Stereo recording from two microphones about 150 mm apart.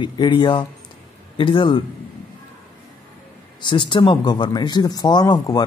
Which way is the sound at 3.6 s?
30° left (ahead or behind).